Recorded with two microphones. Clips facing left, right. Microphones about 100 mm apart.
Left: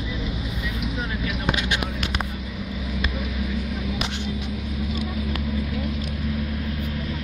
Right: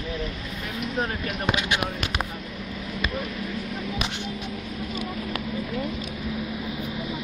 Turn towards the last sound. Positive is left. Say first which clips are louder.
# left 2 dB
turn(degrees=0)  # may be behind; listen again after turning